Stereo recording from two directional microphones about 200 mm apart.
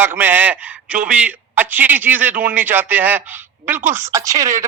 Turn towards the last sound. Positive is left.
turn(degrees=-15)  # may be behind; listen again after turning